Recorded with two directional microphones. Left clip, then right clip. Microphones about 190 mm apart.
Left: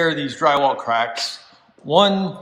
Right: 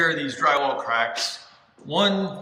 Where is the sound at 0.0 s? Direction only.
20° left (ahead or behind).